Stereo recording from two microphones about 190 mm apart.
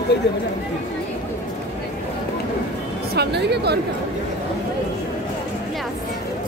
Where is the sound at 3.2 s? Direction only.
60° right (ahead or behind).